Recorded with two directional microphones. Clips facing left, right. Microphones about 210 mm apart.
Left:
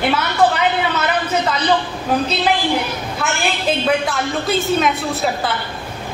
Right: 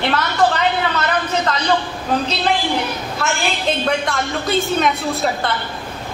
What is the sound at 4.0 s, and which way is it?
A woman's voice, 5° left (ahead or behind).